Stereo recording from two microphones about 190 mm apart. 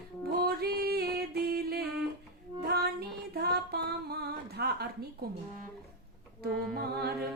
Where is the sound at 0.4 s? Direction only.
55° right (ahead or behind).